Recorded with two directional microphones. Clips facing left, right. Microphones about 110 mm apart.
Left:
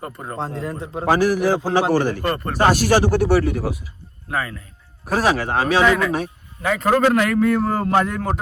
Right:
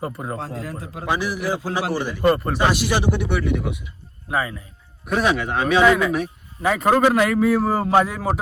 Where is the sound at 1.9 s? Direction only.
50° left (ahead or behind).